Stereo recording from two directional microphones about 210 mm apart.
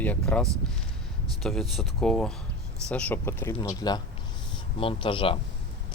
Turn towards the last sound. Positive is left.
turn(degrees=25)  # may be behind; listen again after turning